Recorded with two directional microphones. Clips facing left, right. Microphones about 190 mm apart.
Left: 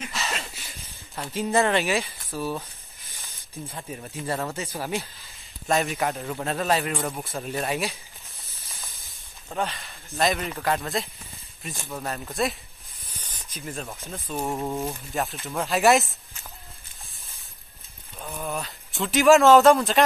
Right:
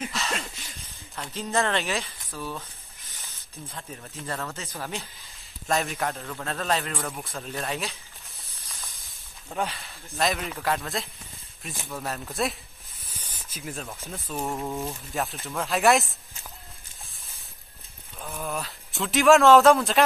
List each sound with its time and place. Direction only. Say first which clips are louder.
0.1 s a sound: even; 5° left (ahead or behind)
1.1 s speech: left 4 dB; 10° left (ahead or behind)
3.7 s speech: left 4 dB; 15° left (ahead or behind)
5.7 s speech: left 3 dB; centre (ahead or behind)
9.5 s speech: left 1 dB; centre (ahead or behind)
13.2 s a sound: left 1 dB; 10° right (ahead or behind)
14.1 s speech: left 2 dB; centre (ahead or behind)
14.5 s speech: left 4 dB; 15° left (ahead or behind)
15.1 s speech: left 1 dB; centre (ahead or behind)
18.2 s speech: left 1 dB; centre (ahead or behind)